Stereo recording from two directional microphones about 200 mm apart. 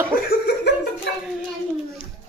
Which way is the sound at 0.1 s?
50° left (ahead or behind).